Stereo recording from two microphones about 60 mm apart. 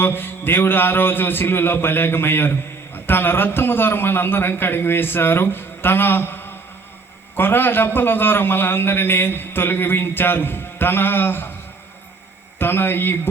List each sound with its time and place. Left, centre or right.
0.0 s a man's voice: left
12.5 s a man's voice: left